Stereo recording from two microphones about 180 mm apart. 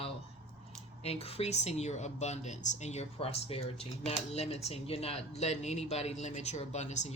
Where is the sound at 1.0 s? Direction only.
35° left (ahead or behind).